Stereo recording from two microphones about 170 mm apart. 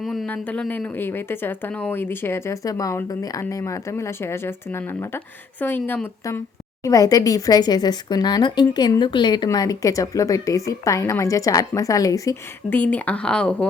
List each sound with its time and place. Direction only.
0.0 s a woman's voice: centre (ahead or behind)